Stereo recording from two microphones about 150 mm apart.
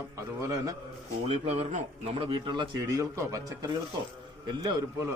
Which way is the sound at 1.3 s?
45° right (ahead or behind).